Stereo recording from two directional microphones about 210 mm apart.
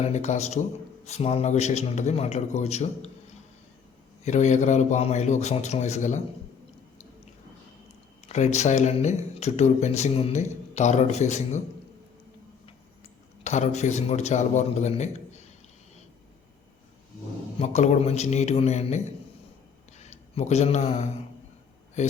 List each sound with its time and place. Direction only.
0.0 s speech: 35° left (ahead or behind)
4.2 s speech: 35° left (ahead or behind)
8.3 s speech: 35° left (ahead or behind)
13.4 s speech: 35° left (ahead or behind)
17.6 s a man's voice: 30° left (ahead or behind)